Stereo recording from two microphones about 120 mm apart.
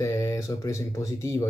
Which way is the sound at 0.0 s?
25° left (ahead or behind).